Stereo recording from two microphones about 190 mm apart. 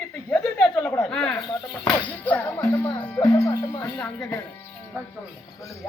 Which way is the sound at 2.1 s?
10° left (ahead or behind).